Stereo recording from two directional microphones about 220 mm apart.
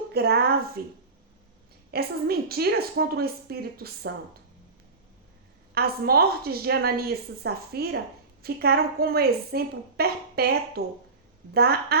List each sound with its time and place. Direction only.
0.1 s a woman's voice: 45° right (ahead or behind)
5.7 s a woman's voice: 45° right (ahead or behind)